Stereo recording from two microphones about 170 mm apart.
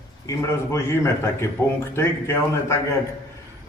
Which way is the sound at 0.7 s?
15° left (ahead or behind).